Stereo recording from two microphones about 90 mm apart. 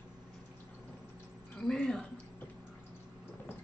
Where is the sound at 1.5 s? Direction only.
10° left (ahead or behind).